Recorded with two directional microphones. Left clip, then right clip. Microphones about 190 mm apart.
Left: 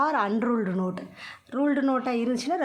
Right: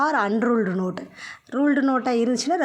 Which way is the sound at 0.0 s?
20° right (ahead or behind).